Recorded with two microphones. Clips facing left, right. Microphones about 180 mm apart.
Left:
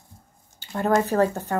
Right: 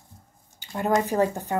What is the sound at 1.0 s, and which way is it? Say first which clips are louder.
Speech: left 2 dB; 15° right (ahead or behind).